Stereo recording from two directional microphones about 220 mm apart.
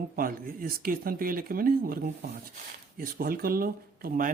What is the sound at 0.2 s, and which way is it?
Speech, 40° right (ahead or behind).